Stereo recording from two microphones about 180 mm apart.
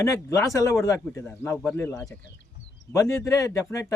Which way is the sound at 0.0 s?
15° left (ahead or behind).